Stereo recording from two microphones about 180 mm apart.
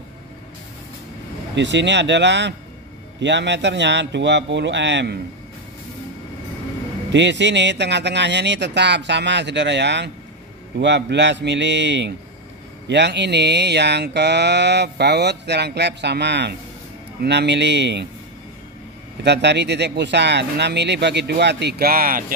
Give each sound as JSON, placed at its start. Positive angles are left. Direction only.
{"t": 1.5, "sound": "mantra", "side_deg": -80}
{"t": 3.2, "sound": "a man's voice", "side_deg": -80}
{"t": 7.1, "sound": "mantra", "side_deg": -80}
{"t": 19.2, "sound": "mantra", "side_deg": -70}